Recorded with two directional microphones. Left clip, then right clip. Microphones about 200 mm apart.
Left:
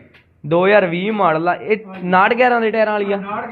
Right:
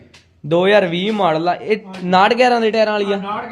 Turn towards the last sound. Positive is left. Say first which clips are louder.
# right 1 dB
turn(degrees=-30)  # may be behind; listen again after turning